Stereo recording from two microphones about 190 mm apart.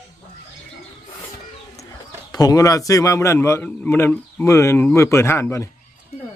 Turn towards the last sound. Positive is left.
turn(degrees=15)  # may be behind; listen again after turning